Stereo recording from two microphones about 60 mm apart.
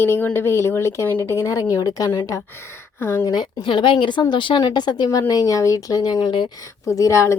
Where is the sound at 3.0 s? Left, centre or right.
Left.